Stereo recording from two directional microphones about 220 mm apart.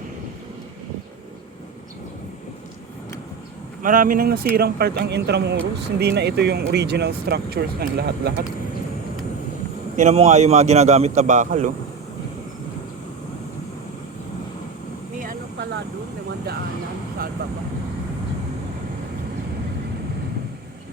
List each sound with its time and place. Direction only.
3.8 s speech: 40° right (ahead or behind)
10.0 s a man's voice: 30° right (ahead or behind)